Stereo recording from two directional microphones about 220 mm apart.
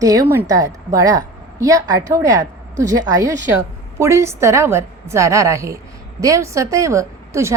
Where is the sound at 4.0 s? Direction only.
10° right (ahead or behind).